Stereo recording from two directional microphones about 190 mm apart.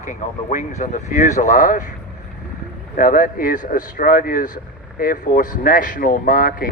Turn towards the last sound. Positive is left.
turn(degrees=50)  # may be behind; listen again after turning